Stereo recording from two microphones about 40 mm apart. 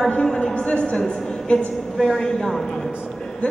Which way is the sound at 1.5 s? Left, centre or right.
Left.